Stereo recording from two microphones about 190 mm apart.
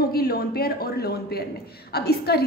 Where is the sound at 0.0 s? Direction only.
50° left (ahead or behind).